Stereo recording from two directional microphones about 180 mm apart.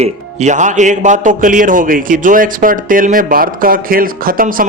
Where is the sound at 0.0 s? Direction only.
40° right (ahead or behind).